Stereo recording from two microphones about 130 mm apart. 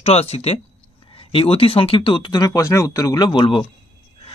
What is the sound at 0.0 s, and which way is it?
Speech, 50° left (ahead or behind).